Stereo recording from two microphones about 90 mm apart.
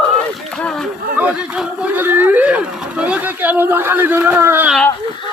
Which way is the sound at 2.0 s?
20° right (ahead or behind).